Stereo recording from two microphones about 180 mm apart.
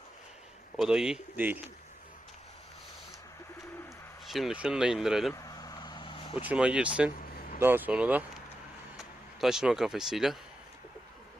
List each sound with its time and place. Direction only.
0.8 s speech: 5° right (ahead or behind)
4.3 s speech: centre (ahead or behind)
5.3 s vehicle: 20° left (ahead or behind)
6.4 s speech: 5° right (ahead or behind)
7.3 s vehicle: 50° left (ahead or behind)
7.6 s speech: 10° right (ahead or behind)